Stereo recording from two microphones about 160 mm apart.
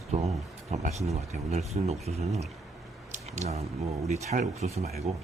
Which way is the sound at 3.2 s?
45° right (ahead or behind).